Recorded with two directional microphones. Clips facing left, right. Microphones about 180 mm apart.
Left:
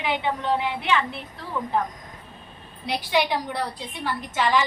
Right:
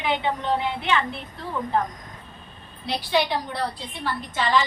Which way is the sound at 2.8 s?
15° left (ahead or behind).